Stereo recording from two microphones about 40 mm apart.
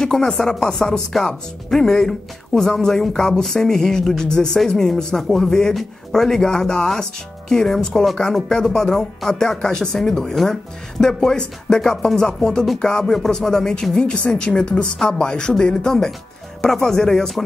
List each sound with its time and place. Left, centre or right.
0.0 s speech: centre
8.5 s speech: centre